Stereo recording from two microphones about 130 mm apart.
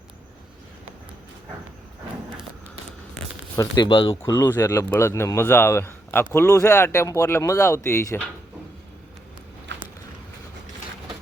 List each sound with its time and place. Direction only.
3.8 s speech: 35° left (ahead or behind)
4.4 s a man's voice: 20° left (ahead or behind)